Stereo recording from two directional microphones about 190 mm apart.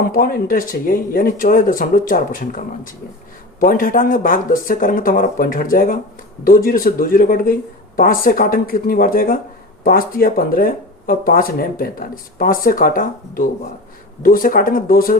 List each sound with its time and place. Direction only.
0.1 s speech: 45° left (ahead or behind)